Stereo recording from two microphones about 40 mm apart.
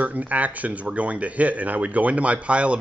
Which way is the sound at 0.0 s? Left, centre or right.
Right.